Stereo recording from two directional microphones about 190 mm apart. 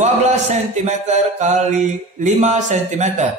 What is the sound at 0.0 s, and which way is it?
Speech, 35° right (ahead or behind).